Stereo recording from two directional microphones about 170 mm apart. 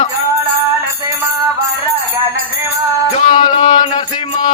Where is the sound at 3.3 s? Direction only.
45° left (ahead or behind).